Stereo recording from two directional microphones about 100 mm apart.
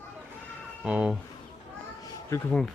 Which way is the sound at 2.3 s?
25° left (ahead or behind).